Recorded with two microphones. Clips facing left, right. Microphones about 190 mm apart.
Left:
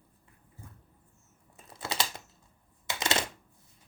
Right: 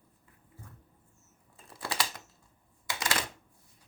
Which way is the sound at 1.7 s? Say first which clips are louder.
Left 1 dB; 25° left (ahead or behind).